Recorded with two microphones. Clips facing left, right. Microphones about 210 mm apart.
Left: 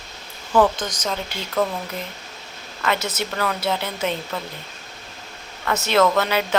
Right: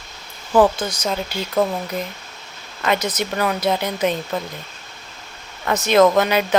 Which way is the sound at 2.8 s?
15° right (ahead or behind).